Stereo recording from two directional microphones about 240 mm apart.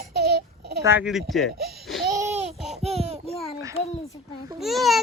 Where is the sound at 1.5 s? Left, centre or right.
Right.